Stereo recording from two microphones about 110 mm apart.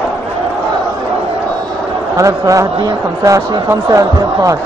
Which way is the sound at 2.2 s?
30° right (ahead or behind).